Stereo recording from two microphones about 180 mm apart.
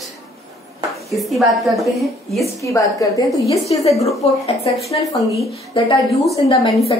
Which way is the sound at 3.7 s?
30° left (ahead or behind).